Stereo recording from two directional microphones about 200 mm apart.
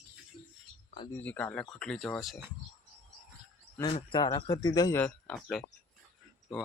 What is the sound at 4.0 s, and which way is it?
Speech, 25° left (ahead or behind).